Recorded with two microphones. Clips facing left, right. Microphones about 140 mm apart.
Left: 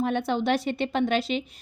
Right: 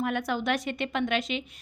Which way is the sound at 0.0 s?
30° left (ahead or behind).